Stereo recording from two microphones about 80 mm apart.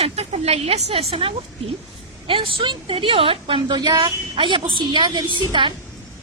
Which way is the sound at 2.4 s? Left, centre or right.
Right.